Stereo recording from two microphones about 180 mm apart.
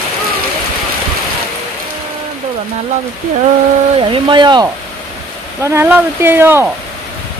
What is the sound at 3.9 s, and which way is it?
Speech, 30° right (ahead or behind).